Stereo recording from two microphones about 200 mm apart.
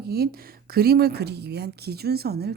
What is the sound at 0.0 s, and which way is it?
Speech, 50° right (ahead or behind).